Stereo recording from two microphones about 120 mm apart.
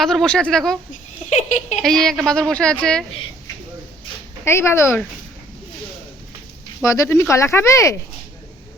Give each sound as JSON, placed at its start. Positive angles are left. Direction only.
{"t": 0.0, "sound": "speech", "side_deg": 5}
{"t": 1.3, "sound": "a sound", "side_deg": 90}
{"t": 1.8, "sound": "a woman's voice", "side_deg": 5}
{"t": 4.4, "sound": "speech", "side_deg": 20}
{"t": 6.8, "sound": "speech", "side_deg": 25}